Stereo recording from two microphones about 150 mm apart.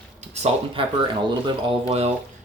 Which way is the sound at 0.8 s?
35° right (ahead or behind).